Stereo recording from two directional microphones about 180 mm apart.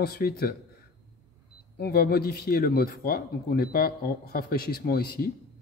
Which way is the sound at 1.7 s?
60° left (ahead or behind).